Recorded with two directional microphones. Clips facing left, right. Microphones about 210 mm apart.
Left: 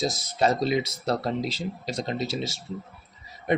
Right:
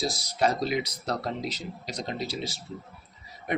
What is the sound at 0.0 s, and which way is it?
Speech, 20° left (ahead or behind).